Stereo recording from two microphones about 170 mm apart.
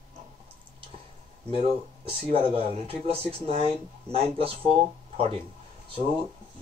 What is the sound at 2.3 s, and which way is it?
Speech, 30° right (ahead or behind).